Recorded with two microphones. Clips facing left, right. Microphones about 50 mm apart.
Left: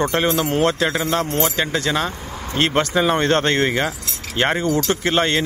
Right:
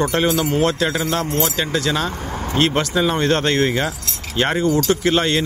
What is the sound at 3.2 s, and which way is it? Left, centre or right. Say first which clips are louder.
A man's voice: even; left.